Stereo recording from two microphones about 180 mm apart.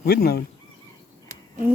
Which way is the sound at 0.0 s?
60° left (ahead or behind).